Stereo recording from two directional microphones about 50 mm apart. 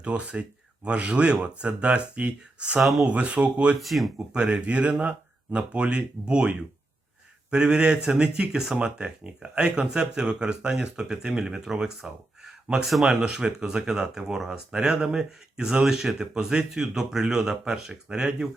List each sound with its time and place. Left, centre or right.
0.0 s speech: right
2.8 s speech: centre
3.1 s speech: right
3.8 s speech: centre
4.3 s speech: centre
7.5 s speech: centre